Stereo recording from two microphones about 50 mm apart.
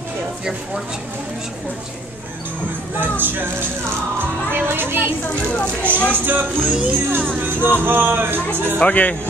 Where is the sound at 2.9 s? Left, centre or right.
Right.